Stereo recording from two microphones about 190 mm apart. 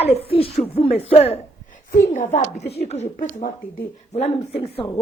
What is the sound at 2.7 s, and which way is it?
A man's voice, 35° left (ahead or behind).